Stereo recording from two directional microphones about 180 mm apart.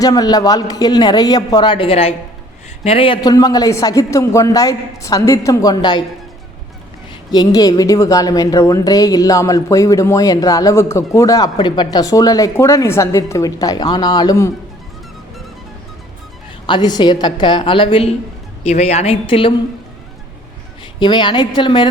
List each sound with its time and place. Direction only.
0.0 s a woman's voice: 20° left (ahead or behind)
7.3 s a woman's voice: 20° left (ahead or behind)
16.6 s a woman's voice: 25° left (ahead or behind)
21.0 s a woman's voice: 25° left (ahead or behind)